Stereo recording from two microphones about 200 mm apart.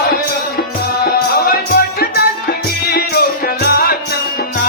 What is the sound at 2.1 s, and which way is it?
Music, 50° left (ahead or behind).